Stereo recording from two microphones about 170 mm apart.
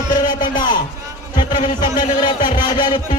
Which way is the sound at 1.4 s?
25° left (ahead or behind).